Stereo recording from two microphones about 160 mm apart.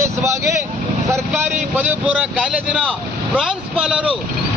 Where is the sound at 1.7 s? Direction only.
10° right (ahead or behind).